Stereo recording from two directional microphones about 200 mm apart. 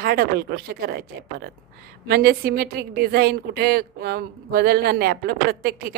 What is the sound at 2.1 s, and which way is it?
A woman's voice, 50° right (ahead or behind).